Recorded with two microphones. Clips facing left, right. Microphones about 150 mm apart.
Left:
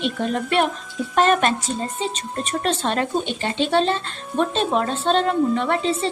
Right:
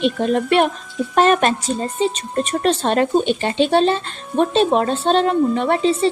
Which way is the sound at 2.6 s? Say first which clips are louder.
Right 5 dB; 40° right (ahead or behind).